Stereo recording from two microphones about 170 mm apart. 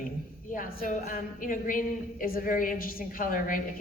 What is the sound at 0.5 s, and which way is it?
Speech, 55° left (ahead or behind).